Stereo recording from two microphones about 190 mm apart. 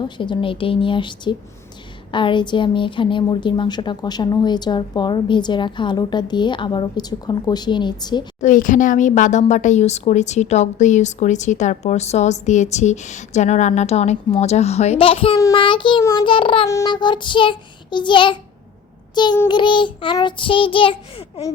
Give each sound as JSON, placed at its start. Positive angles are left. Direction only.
{"t": 0.0, "sound": "a woman's voice", "side_deg": 25}
{"t": 8.4, "sound": "a woman's voice", "side_deg": 40}
{"t": 19.1, "sound": "child singing", "side_deg": 25}
{"t": 19.5, "sound": "a woman's voice", "side_deg": 25}